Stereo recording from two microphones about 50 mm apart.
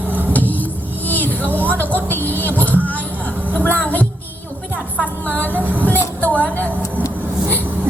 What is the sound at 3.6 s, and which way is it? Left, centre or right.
Music, left.